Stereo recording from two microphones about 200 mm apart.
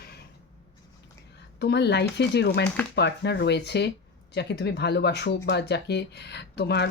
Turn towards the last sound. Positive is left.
turn(degrees=55)  # may be behind; listen again after turning